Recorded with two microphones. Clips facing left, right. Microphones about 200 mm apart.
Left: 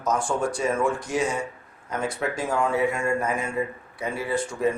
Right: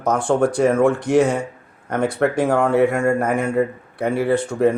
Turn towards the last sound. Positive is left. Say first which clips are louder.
# right 7 dB
turn(degrees=-60)  # may be behind; listen again after turning